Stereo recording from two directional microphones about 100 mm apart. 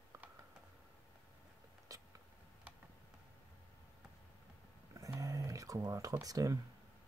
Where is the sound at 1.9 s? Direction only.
35° right (ahead or behind).